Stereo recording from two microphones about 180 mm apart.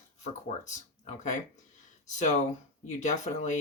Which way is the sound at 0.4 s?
40° left (ahead or behind).